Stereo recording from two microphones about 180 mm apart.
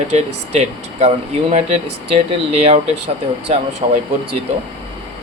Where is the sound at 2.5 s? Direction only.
35° right (ahead or behind).